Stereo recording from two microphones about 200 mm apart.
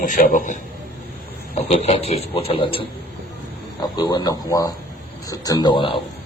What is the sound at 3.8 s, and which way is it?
A man's voice, 20° left (ahead or behind).